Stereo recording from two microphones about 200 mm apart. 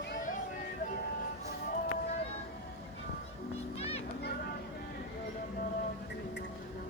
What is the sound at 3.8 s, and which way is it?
Children playing, 30° left (ahead or behind).